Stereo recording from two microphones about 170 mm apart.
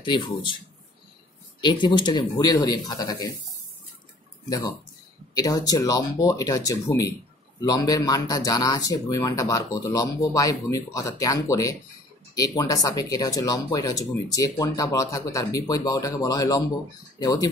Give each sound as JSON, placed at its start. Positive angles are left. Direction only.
{"t": 0.0, "sound": "speech", "side_deg": 30}
{"t": 1.6, "sound": "speech", "side_deg": 25}
{"t": 5.3, "sound": "speech", "side_deg": 20}